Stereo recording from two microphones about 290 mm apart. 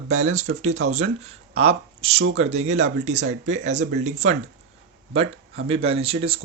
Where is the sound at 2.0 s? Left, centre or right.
Centre.